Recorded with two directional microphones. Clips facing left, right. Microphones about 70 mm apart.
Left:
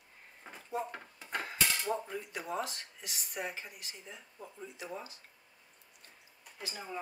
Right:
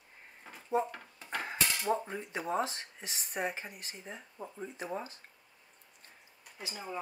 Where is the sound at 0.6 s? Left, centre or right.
Right.